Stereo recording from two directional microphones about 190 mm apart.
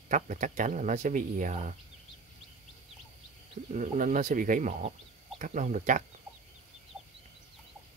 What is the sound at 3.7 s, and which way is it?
Speech, 40° right (ahead or behind).